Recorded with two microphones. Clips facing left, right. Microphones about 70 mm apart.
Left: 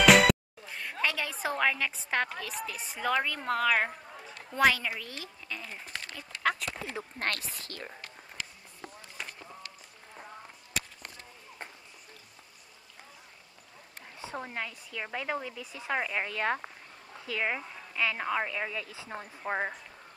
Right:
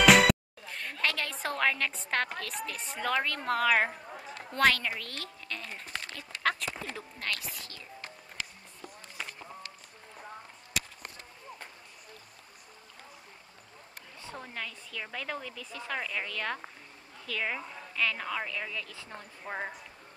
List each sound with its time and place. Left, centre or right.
0.0 s music: centre
1.0 s a sound: centre
2.3 s a woman's voice: centre
5.8 s a sound: centre
7.2 s a woman's voice: left
14.2 s a woman's voice: left